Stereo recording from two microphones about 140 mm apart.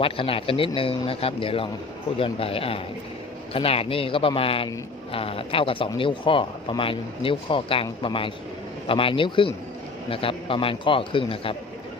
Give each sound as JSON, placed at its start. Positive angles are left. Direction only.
{"t": 0.0, "sound": "speech", "side_deg": 40}